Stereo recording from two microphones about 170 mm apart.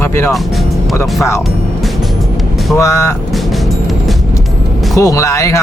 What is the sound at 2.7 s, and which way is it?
Speech, 20° left (ahead or behind).